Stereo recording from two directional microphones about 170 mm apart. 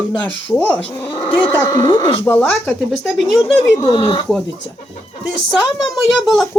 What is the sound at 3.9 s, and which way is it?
Speech, 30° left (ahead or behind).